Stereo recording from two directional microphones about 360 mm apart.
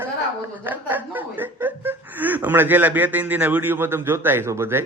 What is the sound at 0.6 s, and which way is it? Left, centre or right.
Speech, centre.